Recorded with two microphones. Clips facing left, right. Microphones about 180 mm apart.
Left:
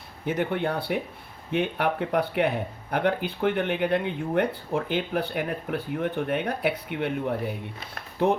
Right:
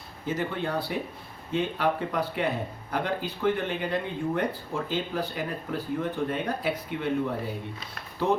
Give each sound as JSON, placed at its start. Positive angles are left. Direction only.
{"t": 0.3, "sound": "speech", "side_deg": 60}